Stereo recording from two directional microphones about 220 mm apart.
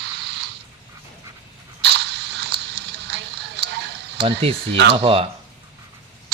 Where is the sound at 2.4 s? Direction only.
50° right (ahead or behind).